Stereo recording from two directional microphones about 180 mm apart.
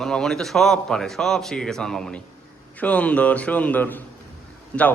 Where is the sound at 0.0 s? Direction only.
5° left (ahead or behind).